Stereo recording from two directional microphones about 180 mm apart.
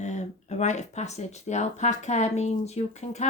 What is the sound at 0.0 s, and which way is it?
Speech, 40° left (ahead or behind).